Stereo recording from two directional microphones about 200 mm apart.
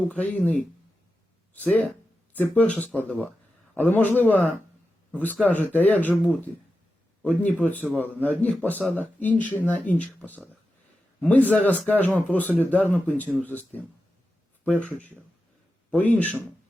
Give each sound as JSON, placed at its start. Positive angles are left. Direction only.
{"t": 0.1, "sound": "speech", "side_deg": 5}
{"t": 1.5, "sound": "a man's voice", "side_deg": 10}
{"t": 16.1, "sound": "speech", "side_deg": 5}